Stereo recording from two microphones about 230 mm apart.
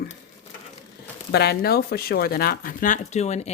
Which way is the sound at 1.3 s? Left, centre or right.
Left.